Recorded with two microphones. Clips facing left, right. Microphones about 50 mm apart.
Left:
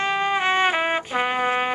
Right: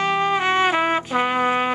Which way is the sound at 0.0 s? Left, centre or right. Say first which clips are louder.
Right 2 dB; centre.